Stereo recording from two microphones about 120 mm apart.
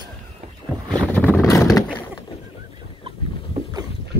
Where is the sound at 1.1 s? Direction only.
15° left (ahead or behind).